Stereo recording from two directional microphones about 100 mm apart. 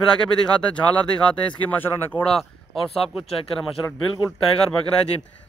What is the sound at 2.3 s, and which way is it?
Speech, centre (ahead or behind).